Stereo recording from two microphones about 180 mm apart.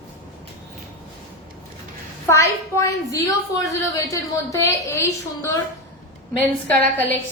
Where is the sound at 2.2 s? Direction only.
15° left (ahead or behind).